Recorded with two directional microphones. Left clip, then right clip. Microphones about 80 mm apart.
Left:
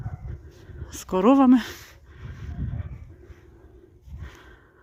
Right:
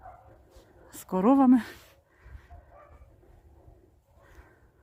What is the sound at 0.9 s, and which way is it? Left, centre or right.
Speech, centre.